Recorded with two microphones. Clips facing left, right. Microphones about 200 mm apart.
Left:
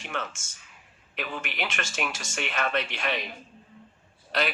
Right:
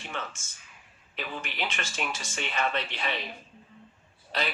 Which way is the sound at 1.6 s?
45° left (ahead or behind).